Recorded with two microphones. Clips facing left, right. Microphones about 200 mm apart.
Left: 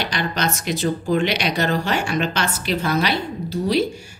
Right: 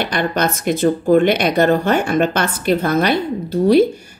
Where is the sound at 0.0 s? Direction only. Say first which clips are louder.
Right 5 dB; 55° right (ahead or behind).